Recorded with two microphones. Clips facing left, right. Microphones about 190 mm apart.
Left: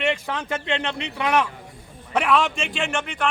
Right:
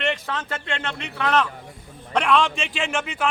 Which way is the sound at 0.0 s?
10° left (ahead or behind).